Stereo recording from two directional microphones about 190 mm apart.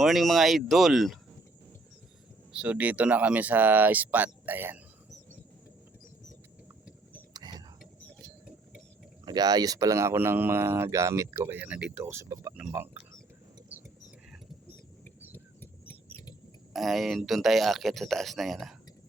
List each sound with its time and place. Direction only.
0.0 s speech: centre (ahead or behind)
2.5 s speech: 5° right (ahead or behind)
7.3 s a sound: 20° right (ahead or behind)
9.2 s speech: 20° right (ahead or behind)
15.3 s a sound: 10° left (ahead or behind)
16.7 s speech: centre (ahead or behind)